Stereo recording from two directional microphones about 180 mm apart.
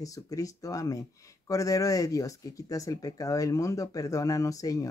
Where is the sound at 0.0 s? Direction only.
20° left (ahead or behind).